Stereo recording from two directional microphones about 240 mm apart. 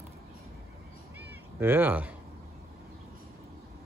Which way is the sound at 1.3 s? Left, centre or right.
Centre.